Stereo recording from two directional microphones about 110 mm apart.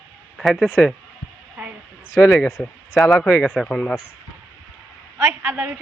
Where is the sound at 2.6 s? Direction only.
20° left (ahead or behind).